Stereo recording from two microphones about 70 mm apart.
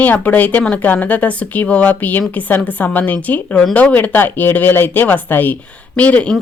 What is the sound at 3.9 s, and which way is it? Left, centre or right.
Speech, left.